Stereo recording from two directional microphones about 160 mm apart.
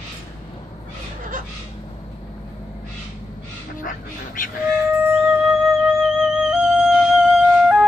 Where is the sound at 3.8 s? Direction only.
60° left (ahead or behind).